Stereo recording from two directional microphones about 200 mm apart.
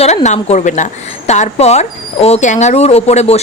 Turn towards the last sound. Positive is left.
turn(degrees=30)  # may be behind; listen again after turning